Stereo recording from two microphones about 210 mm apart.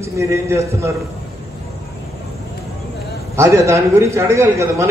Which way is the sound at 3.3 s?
15° right (ahead or behind).